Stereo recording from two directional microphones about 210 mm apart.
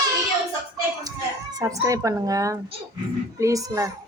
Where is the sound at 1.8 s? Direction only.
15° right (ahead or behind).